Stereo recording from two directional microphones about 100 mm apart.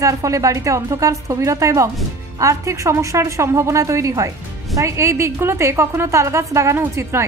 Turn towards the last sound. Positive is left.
turn(degrees=-25)  # may be behind; listen again after turning